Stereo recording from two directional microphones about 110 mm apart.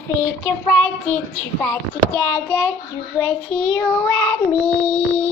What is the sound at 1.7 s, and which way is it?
A child's voice, 20° left (ahead or behind).